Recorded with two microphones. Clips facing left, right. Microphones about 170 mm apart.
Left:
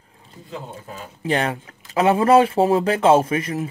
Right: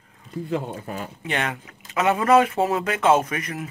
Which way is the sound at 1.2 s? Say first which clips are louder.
Left 7 dB; 35° left (ahead or behind).